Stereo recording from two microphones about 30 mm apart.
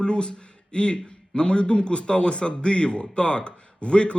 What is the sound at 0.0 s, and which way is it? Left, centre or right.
A man's voice, left.